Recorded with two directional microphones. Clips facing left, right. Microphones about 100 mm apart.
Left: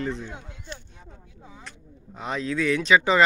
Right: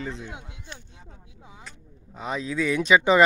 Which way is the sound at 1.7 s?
Centre (ahead or behind).